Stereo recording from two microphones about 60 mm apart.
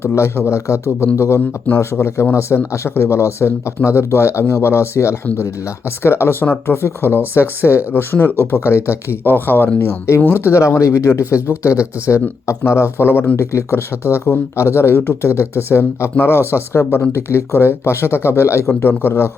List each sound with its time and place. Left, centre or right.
0.0 s speech: left
9.2 s speech: left
13.3 s speech: left